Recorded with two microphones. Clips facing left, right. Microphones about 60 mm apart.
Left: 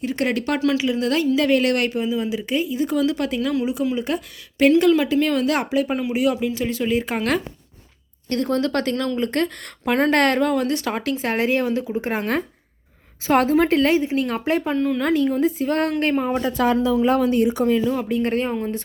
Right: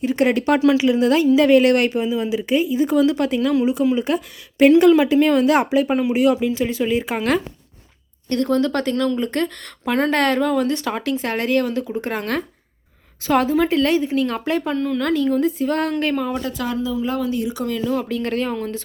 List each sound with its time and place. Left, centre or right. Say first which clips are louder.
0.0 s a woman's voice: right 5 dB; centre
4.5 s a woman's voice: right 4 dB; centre
13.3 s a woman's voice: even; left
13.7 s speech: even; centre
16.1 s a woman's voice: left 2 dB; left
16.7 s speech: left 3 dB; left